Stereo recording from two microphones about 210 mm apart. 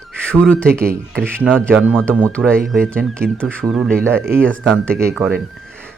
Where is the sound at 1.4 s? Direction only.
10° right (ahead or behind).